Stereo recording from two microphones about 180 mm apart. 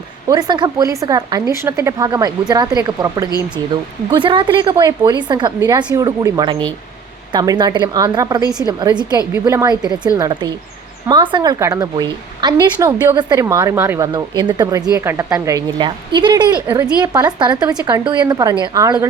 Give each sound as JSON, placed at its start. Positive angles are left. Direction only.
{"t": 0.3, "sound": "a woman's voice", "side_deg": -25}
{"t": 14.1, "sound": "a woman's voice", "side_deg": -25}